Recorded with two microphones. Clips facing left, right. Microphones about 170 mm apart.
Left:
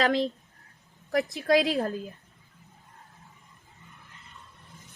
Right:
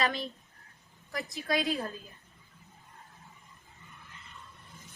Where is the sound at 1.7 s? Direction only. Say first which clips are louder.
Left 7 dB; 80° left.